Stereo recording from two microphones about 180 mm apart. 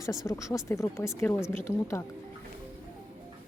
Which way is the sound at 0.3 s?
15° left (ahead or behind).